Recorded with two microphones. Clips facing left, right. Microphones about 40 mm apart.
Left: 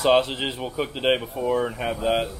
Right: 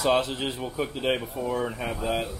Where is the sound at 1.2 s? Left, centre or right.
Centre.